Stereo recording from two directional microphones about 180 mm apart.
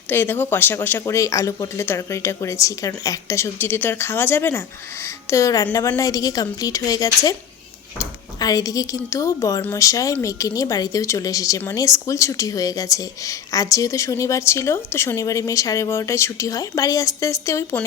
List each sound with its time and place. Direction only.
0.1 s a woman's voice: 10° left (ahead or behind)